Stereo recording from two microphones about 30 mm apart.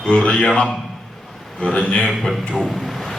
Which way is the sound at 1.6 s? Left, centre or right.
Left.